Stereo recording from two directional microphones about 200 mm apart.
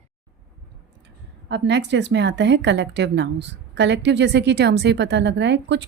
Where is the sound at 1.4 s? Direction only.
65° right (ahead or behind).